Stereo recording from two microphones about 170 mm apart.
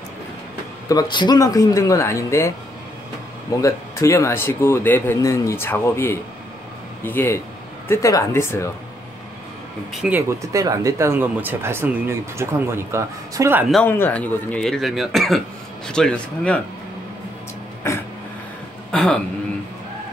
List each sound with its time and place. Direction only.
0.8 s speech: 25° left (ahead or behind)
3.5 s speech: 20° left (ahead or behind)
10.0 s speech: 15° right (ahead or behind)
13.8 s speech: 10° left (ahead or behind)
18.9 s a sound: 5° left (ahead or behind)